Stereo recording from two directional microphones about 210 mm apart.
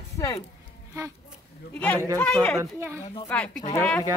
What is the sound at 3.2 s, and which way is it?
Speech, 5° left (ahead or behind).